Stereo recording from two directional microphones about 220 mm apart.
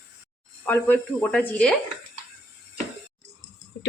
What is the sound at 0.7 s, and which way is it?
Speech, 10° left (ahead or behind).